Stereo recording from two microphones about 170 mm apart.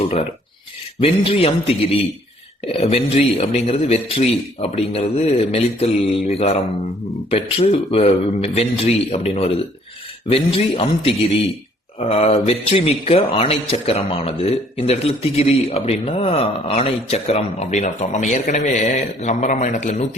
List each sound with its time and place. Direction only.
0.9 s speech: 35° left (ahead or behind)